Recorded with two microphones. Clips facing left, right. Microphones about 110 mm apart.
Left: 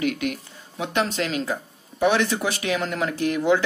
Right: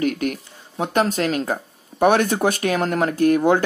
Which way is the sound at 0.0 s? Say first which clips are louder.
Right 3 dB; 45° right (ahead or behind).